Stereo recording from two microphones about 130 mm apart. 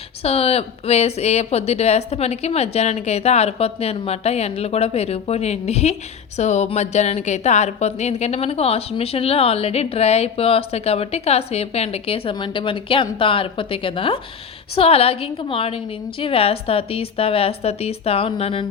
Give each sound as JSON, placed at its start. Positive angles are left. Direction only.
{"t": 0.2, "sound": "a woman's voice", "side_deg": 50}